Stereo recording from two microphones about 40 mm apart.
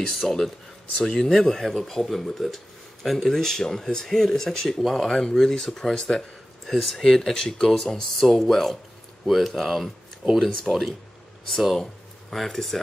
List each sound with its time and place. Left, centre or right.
0.0 s speech: centre
6.7 s speech: centre